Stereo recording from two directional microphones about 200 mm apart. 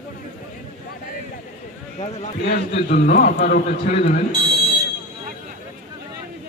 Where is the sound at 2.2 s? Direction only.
35° left (ahead or behind).